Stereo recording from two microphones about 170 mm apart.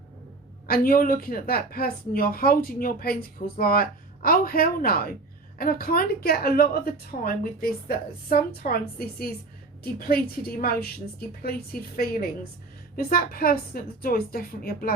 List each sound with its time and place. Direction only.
0.7 s speech: 60° left (ahead or behind)